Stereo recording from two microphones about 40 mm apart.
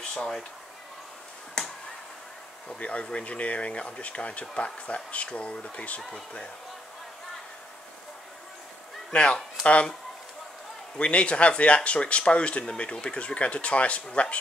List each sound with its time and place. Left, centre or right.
0.0 s a sound: left
1.6 s finger snapping: centre
2.8 s speech: left
9.1 s speech: left
11.0 s speech: left